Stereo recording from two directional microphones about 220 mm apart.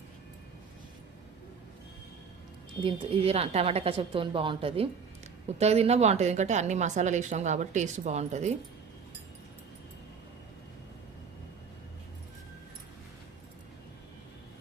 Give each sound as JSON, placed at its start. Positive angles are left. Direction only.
{"t": 2.8, "sound": "a woman's voice", "side_deg": -25}